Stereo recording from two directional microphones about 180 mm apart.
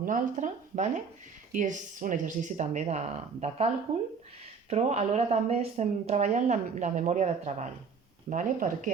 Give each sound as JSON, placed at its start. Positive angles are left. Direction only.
{"t": 0.0, "sound": "speech", "side_deg": -45}
{"t": 4.7, "sound": "a woman's voice", "side_deg": -40}